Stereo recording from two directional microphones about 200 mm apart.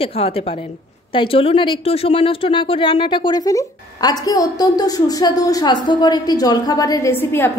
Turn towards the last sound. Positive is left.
turn(degrees=10)  # may be behind; listen again after turning